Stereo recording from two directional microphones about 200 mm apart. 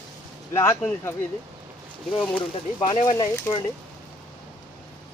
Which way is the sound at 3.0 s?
20° left (ahead or behind).